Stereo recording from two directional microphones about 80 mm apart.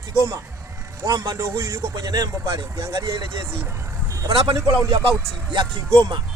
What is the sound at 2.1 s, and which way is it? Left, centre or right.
Speech, right.